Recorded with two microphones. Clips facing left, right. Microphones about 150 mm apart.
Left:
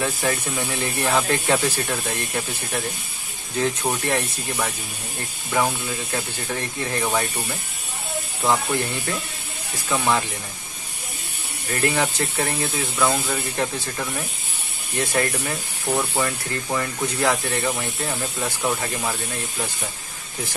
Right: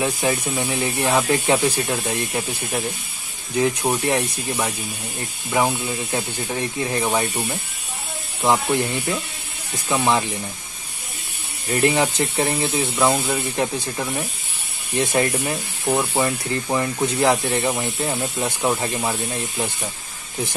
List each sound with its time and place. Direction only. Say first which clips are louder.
0.0 s speech: right 2 dB; 20° right (ahead or behind)
9.8 s speech: right 2 dB; 20° right (ahead or behind)
11.7 s speech: right 4 dB; 20° right (ahead or behind)